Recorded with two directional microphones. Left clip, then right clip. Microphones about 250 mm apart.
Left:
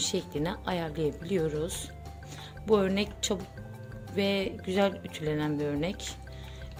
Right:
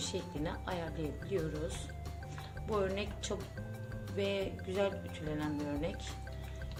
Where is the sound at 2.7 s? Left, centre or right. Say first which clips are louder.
Left 9 dB; left.